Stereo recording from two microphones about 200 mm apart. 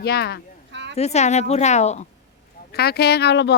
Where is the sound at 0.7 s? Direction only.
60° right (ahead or behind).